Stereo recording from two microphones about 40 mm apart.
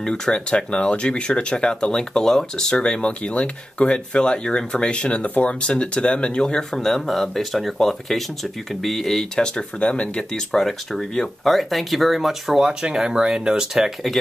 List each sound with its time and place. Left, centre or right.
0.0 s speech: centre
6.9 s speech: centre
9.8 s speech: left
10.3 s speech: centre
12.5 s speech: centre
13.7 s speech: centre